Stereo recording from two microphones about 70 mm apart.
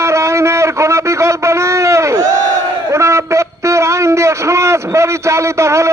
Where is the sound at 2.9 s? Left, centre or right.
Right.